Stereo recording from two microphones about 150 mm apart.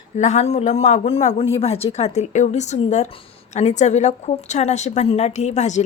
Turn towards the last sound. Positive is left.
turn(degrees=50)  # may be behind; listen again after turning